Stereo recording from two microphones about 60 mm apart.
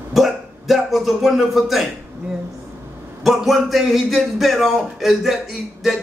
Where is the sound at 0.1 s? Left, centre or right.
Centre.